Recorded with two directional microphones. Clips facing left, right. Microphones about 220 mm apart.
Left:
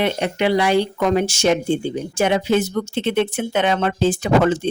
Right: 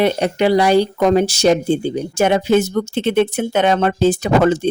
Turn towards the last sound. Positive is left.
turn(degrees=-40)  # may be behind; listen again after turning